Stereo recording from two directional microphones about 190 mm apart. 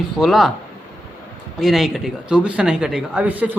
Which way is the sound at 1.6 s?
Centre (ahead or behind).